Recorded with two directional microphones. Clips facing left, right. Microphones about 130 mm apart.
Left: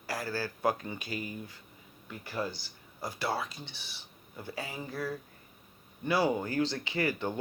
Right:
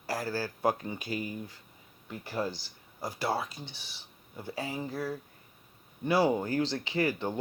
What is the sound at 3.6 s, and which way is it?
Speech, 40° right (ahead or behind).